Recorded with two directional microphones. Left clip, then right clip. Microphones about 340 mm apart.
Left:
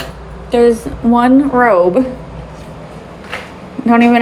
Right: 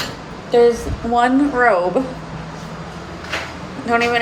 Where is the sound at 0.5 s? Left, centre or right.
Left.